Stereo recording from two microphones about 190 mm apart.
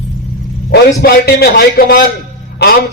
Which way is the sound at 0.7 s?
55° left (ahead or behind).